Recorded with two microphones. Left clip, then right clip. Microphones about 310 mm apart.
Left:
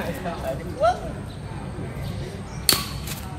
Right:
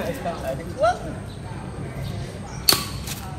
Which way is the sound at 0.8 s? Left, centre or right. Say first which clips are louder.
Even; left.